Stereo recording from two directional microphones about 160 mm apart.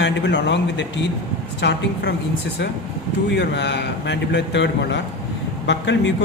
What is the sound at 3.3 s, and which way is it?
A man's voice, 90° left.